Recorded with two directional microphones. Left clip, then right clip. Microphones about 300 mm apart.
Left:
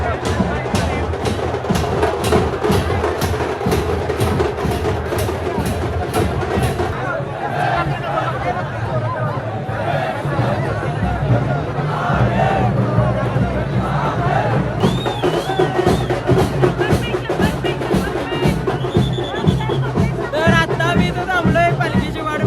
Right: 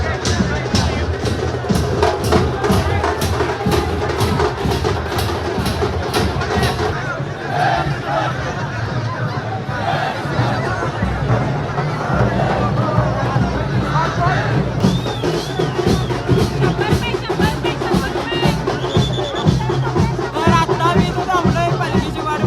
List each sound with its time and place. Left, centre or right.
2.0 s music: right
20.4 s music: centre